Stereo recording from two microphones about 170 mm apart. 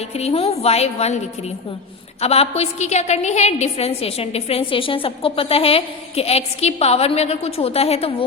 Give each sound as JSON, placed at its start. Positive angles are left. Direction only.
{"t": 0.1, "sound": "a woman's voice", "side_deg": 40}
{"t": 2.2, "sound": "a woman's voice", "side_deg": 35}